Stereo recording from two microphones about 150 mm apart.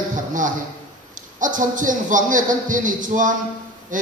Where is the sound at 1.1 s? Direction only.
60° right (ahead or behind).